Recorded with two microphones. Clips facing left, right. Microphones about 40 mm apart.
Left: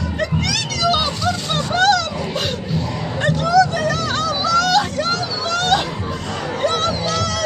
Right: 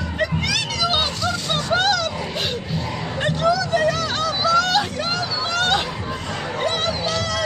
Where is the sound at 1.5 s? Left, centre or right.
Centre.